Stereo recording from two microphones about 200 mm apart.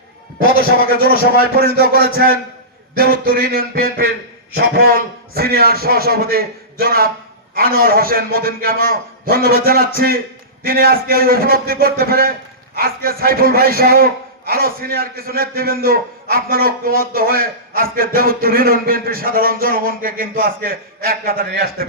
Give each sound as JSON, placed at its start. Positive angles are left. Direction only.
{"t": 0.9, "sound": "speech", "side_deg": -50}
{"t": 1.9, "sound": "a man's voice", "side_deg": 50}
{"t": 3.0, "sound": "speech", "side_deg": -50}